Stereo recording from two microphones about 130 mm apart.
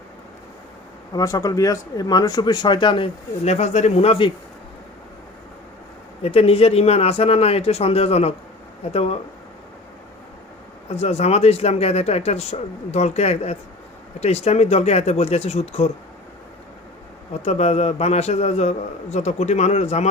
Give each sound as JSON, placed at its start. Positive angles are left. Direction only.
{"t": 1.1, "sound": "speech", "side_deg": 25}
{"t": 3.4, "sound": "speech", "side_deg": 60}
{"t": 6.2, "sound": "speech", "side_deg": 50}
{"t": 10.8, "sound": "speech", "side_deg": 55}
{"t": 17.4, "sound": "speech", "side_deg": 55}